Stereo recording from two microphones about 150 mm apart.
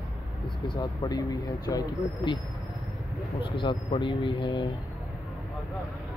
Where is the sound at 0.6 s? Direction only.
30° left (ahead or behind).